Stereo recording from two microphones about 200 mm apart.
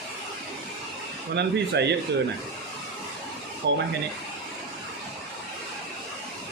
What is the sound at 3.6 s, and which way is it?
Speech, 60° right (ahead or behind).